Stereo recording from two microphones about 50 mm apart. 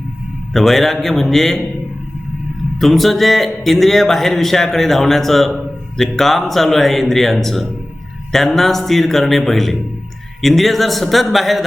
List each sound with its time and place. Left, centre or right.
0.5 s speech: centre
2.7 s speech: centre